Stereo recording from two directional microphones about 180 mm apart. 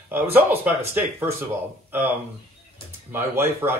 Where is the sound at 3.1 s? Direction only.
10° right (ahead or behind).